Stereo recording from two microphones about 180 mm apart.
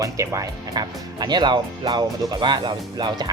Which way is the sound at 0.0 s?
20° right (ahead or behind).